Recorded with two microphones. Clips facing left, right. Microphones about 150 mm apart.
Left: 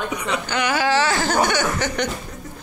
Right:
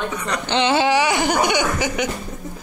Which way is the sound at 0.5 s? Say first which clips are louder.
Right 4 dB; 25° right (ahead or behind).